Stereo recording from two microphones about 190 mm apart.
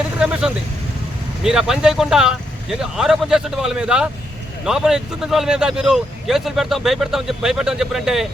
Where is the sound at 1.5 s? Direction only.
5° right (ahead or behind).